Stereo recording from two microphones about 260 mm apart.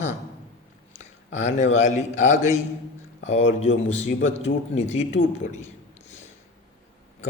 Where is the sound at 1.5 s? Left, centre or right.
Left.